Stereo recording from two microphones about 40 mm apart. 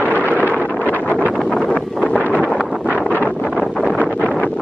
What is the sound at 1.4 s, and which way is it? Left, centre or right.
Wind noise, centre.